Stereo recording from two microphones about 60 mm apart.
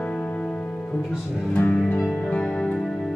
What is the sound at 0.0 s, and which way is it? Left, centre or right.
Music, centre.